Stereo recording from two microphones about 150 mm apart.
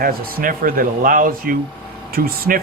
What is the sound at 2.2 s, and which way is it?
Speech, 80° right.